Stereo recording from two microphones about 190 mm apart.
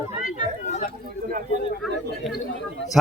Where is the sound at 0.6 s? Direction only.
40° left (ahead or behind).